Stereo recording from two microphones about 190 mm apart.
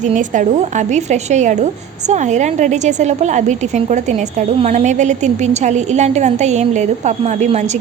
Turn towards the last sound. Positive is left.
turn(degrees=-35)  # may be behind; listen again after turning